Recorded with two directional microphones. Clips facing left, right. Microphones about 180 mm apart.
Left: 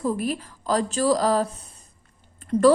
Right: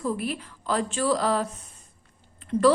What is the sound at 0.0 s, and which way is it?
A woman's voice, 40° left (ahead or behind).